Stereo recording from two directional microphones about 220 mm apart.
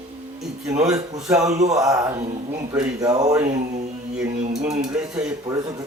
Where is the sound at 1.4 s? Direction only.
30° right (ahead or behind).